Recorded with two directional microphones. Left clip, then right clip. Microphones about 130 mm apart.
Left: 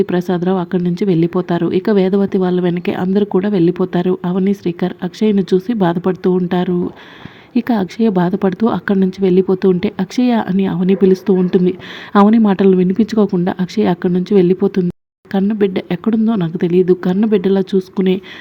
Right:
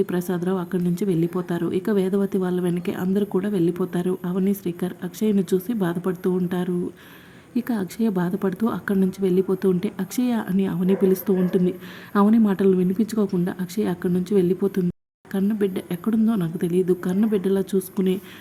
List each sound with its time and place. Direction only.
0.0 s a woman's voice: 30° left (ahead or behind)